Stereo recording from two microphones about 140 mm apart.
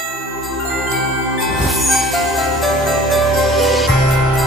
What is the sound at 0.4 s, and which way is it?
Music, centre (ahead or behind).